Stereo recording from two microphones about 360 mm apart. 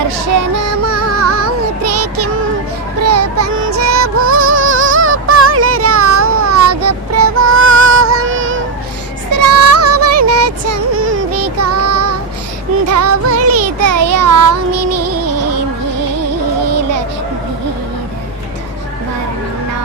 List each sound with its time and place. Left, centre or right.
0.3 s music: right
16.6 s music: right